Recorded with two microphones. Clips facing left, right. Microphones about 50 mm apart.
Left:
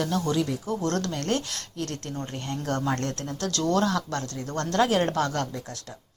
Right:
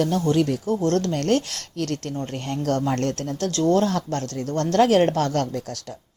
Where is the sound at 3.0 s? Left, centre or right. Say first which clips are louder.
Right 5 dB; right.